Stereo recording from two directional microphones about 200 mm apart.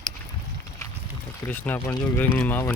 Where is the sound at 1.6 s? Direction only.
10° left (ahead or behind).